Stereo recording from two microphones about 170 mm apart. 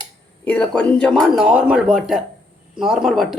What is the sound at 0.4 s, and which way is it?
Speech, 5° left (ahead or behind).